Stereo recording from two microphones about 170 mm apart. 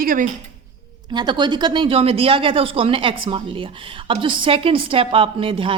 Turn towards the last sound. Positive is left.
turn(degrees=-30)  # may be behind; listen again after turning